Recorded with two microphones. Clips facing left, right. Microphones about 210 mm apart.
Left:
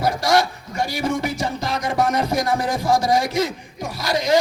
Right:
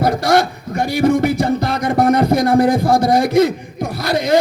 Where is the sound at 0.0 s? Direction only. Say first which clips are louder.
Right 4 dB; 55° right (ahead or behind).